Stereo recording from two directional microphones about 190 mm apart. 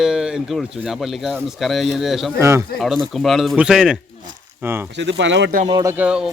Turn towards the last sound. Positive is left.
turn(degrees=-5)  # may be behind; listen again after turning